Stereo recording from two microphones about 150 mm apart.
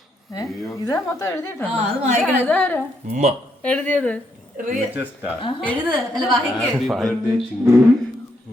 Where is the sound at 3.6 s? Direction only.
10° left (ahead or behind).